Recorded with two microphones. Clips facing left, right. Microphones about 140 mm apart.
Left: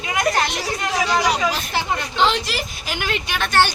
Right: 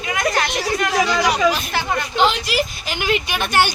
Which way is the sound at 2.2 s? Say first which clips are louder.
Right 2 dB; centre (ahead or behind).